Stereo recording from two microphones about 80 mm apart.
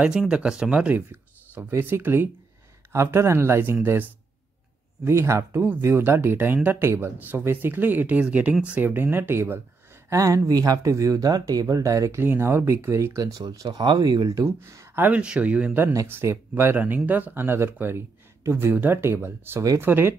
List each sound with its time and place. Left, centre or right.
0.0 s speech: centre
1.7 s speech: right
5.6 s speech: right
10.0 s speech: right
12.2 s speech: right
13.4 s speech: right
14.6 s speech: right
16.1 s speech: right